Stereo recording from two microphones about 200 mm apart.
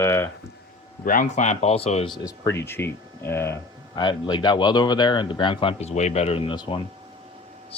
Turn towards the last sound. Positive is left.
turn(degrees=25)  # may be behind; listen again after turning